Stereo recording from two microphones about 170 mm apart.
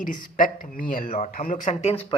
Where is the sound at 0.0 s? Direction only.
55° left (ahead or behind).